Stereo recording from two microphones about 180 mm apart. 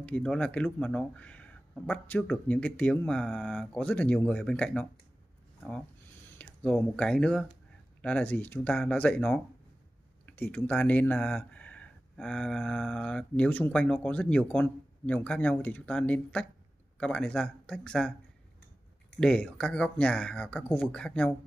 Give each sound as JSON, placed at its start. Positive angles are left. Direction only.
{"t": 0.0, "sound": "speech", "side_deg": 5}
{"t": 6.3, "sound": "speech", "side_deg": 5}
{"t": 19.1, "sound": "speech", "side_deg": 5}